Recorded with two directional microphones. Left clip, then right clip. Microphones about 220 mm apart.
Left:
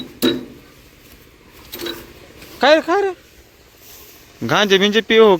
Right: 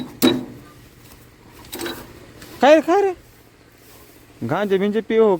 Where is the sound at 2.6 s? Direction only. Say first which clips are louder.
Even; 20° right (ahead or behind).